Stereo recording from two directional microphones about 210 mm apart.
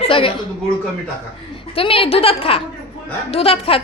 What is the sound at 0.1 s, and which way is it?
Speech, 25° left (ahead or behind).